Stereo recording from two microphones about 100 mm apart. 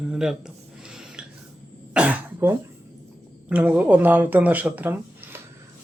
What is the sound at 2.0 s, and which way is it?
Cough, 15° right (ahead or behind).